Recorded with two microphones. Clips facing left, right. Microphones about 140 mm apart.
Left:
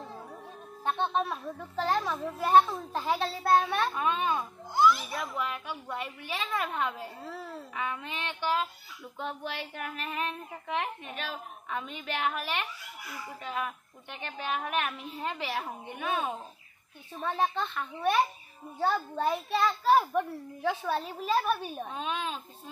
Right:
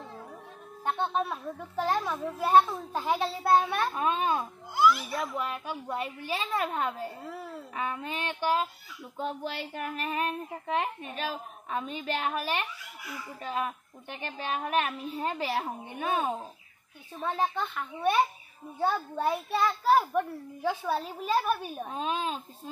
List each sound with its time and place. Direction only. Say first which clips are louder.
0.8 s a child's voice: even; 10° right (ahead or behind)
3.9 s a woman's voice: right 1 dB; 35° right (ahead or behind)
4.7 s a sound: even; 25° left (ahead or behind)
5.1 s a woman's voice: right 2 dB; 35° right (ahead or behind)
17.3 s a child's voice: even; 10° right (ahead or behind)
21.9 s a woman's voice: right 4 dB; 35° right (ahead or behind)